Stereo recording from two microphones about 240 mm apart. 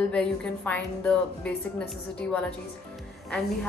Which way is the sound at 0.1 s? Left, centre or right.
Centre.